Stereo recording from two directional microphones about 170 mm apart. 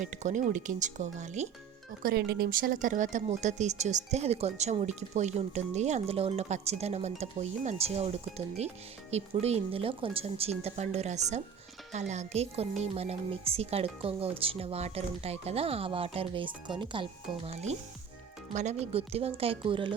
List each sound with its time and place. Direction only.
0.0 s speech: 45° right (ahead or behind)
2.0 s speech: 65° right (ahead or behind); by 19.9 s 30° right (ahead or behind)